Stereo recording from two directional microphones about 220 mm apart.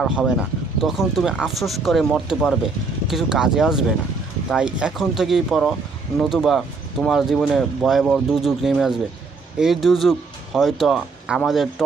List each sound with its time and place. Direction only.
0.0 s speech: 5° right (ahead or behind)